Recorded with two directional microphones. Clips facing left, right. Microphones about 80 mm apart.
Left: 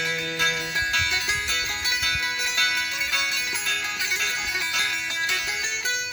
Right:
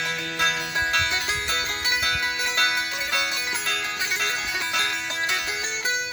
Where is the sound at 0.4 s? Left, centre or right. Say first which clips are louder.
Right 2 dB; right.